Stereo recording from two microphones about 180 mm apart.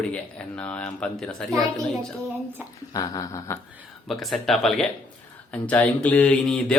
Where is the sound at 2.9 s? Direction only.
20° left (ahead or behind).